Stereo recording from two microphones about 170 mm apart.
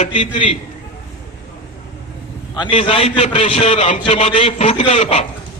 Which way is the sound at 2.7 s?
35° left (ahead or behind).